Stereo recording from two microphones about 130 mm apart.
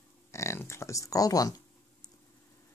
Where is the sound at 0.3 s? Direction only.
20° left (ahead or behind).